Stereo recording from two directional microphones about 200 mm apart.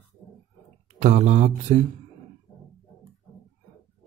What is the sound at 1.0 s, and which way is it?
Speech, 35° right (ahead or behind).